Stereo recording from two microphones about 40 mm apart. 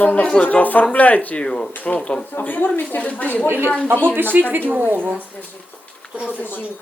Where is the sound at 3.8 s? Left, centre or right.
Right.